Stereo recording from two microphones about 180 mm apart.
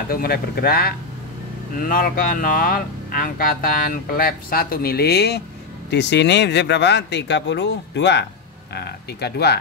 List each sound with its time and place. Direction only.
0.1 s speech: 55° left (ahead or behind)